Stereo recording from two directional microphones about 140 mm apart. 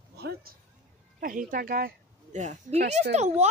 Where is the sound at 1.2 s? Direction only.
75° right (ahead or behind).